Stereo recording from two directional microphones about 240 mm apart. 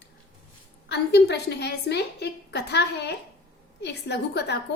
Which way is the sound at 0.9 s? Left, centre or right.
Left.